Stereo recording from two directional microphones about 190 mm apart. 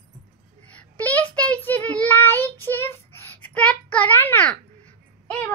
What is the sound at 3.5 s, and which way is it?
A child's voice, 5° left (ahead or behind).